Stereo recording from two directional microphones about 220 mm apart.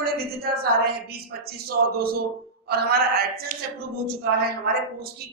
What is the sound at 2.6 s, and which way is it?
Speech, 45° right (ahead or behind).